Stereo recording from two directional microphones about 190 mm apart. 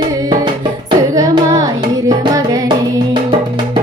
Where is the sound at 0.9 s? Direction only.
20° right (ahead or behind).